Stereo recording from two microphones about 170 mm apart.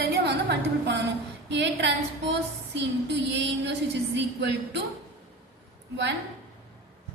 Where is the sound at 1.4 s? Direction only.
90° right.